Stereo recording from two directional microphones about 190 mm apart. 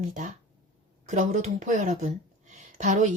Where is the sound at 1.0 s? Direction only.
40° right (ahead or behind).